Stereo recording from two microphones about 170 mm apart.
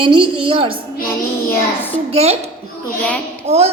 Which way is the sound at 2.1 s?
40° right (ahead or behind).